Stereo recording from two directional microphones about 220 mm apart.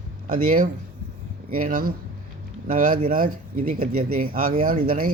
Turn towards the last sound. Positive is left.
turn(degrees=-40)  # may be behind; listen again after turning